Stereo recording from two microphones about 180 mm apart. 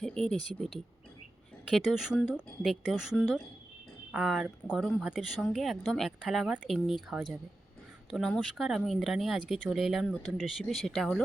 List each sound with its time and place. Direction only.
0.0 s speech: 5° left (ahead or behind)